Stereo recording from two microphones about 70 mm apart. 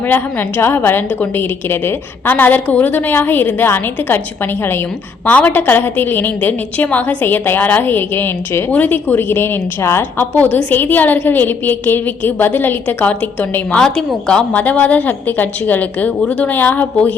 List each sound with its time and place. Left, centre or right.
0.1 s a woman's voice: left
5.5 s a woman's voice: left
13.7 s a woman's voice: centre; by 17.2 s left